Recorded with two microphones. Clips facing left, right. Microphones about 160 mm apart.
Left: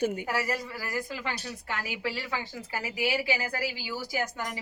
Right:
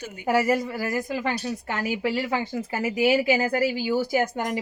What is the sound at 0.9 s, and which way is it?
Speech, 25° right (ahead or behind).